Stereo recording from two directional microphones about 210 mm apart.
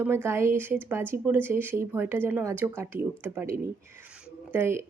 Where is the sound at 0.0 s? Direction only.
10° right (ahead or behind).